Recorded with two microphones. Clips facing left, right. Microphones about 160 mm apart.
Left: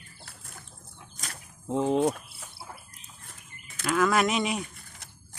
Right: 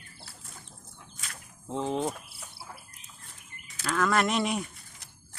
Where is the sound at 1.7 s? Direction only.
15° left (ahead or behind).